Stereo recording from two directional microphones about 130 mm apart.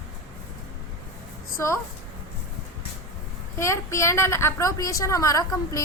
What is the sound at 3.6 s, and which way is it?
A woman's voice, 20° left (ahead or behind).